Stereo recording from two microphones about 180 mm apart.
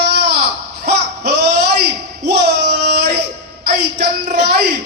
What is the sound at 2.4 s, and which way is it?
Singing, 70° right (ahead or behind).